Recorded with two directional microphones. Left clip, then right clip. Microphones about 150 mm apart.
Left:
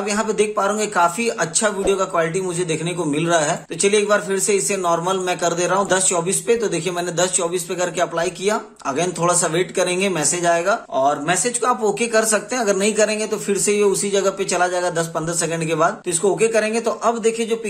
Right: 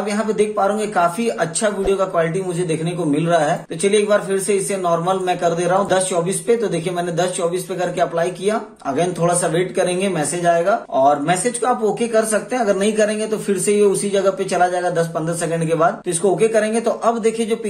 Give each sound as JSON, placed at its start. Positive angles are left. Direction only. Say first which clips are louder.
{"t": 0.1, "sound": "speech", "louder": "even", "side_deg": 30}